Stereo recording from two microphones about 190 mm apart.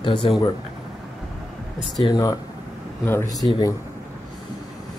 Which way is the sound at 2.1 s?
20° left (ahead or behind).